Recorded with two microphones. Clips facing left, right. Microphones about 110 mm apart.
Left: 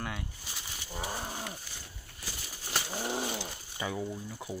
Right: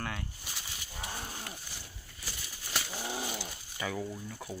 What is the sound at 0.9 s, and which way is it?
Roaring cats, 25° left (ahead or behind).